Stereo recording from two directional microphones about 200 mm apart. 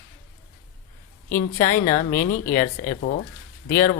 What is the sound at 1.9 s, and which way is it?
Speech, 45° left (ahead or behind).